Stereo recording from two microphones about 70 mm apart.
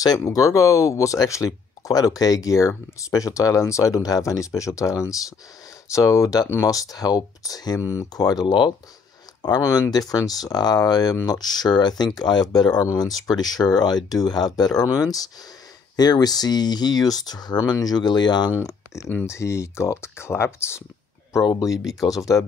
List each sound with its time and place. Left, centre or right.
0.2 s speech: left
7.8 s speech: left
8.2 s speech: left
9.4 s speech: left
12.8 s speech: left
16.0 s speech: left
19.2 s speech: left
22.0 s speech: left